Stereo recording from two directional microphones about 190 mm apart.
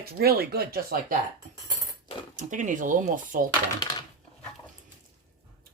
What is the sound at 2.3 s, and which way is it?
Speech, 40° right (ahead or behind).